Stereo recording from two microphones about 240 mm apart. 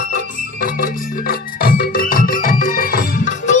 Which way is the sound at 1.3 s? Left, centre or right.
Left.